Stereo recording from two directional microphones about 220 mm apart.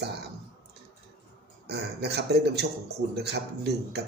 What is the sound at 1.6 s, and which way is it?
A man's voice, 50° right (ahead or behind).